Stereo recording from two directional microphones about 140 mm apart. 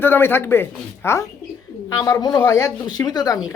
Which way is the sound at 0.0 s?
15° left (ahead or behind).